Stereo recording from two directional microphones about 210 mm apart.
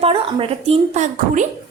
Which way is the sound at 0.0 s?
25° right (ahead or behind).